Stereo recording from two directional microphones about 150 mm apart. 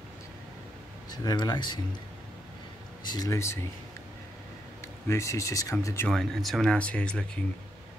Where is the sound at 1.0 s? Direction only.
25° left (ahead or behind).